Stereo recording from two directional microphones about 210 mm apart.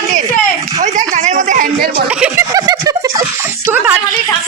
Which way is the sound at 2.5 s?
20° right (ahead or behind).